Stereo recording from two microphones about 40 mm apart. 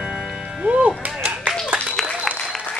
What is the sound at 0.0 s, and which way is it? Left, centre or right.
Music, centre.